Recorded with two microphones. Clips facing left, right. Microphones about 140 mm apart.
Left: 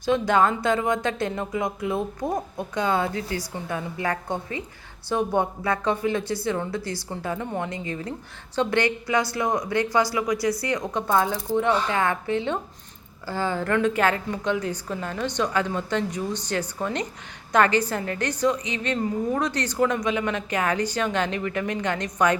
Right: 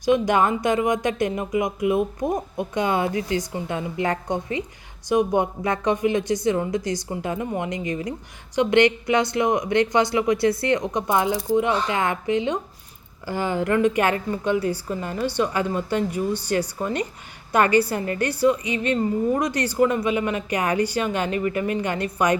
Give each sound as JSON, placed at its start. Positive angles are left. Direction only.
{"t": 0.0, "sound": "a woman's voice", "side_deg": -15}